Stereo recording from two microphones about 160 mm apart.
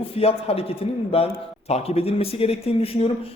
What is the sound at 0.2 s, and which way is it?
A man's voice, 40° left (ahead or behind).